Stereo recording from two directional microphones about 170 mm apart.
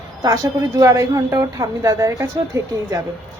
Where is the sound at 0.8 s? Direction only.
20° right (ahead or behind).